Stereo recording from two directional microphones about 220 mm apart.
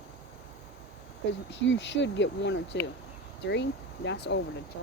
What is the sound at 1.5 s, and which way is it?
Speech, 55° left (ahead or behind).